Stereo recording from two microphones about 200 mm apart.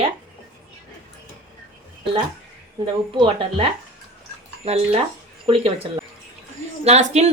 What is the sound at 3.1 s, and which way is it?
Speech, 25° right (ahead or behind).